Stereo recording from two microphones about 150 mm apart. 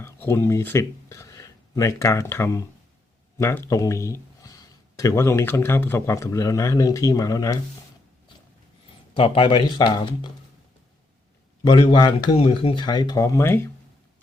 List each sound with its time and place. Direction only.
0.0 s speech: 15° left (ahead or behind)
9.1 s speech: 35° left (ahead or behind)
11.6 s speech: 30° left (ahead or behind)
12.4 s speech: 40° left (ahead or behind); by 13.7 s 15° left (ahead or behind)